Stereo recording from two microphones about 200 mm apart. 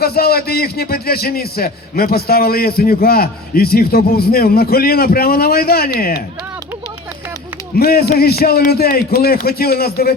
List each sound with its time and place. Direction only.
0.0 s a man's voice: 50° left (ahead or behind)
7.8 s a man's voice: 50° left (ahead or behind)